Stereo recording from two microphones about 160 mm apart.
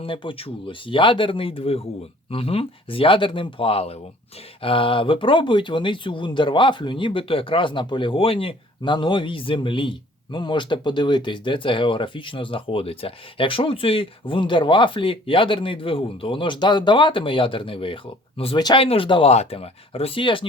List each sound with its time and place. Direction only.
0.0 s speech: 30° left (ahead or behind)